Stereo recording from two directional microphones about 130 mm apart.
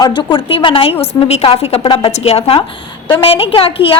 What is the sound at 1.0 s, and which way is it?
A woman's voice, 50° left (ahead or behind).